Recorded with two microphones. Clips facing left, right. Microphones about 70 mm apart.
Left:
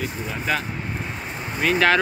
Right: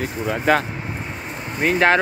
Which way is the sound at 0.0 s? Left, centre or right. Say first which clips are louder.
Right 6 dB; right.